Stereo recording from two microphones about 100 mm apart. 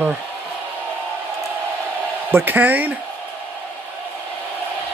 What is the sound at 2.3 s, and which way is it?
Speech, 20° right (ahead or behind).